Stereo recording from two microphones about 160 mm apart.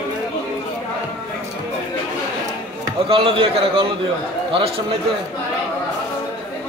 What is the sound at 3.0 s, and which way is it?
Speech, 35° right (ahead or behind).